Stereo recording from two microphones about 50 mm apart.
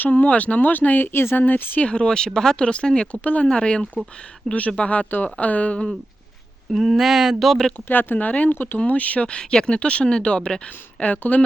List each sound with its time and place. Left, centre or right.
0.0 s speech: left
1.4 s speech: left
1.8 s speech: left
3.1 s speech: left
6.7 s speech: centre
7.3 s speech: centre
7.9 s speech: left
8.9 s speech: left